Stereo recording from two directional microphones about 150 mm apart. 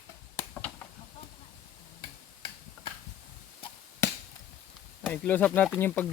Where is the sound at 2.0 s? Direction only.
35° left (ahead or behind).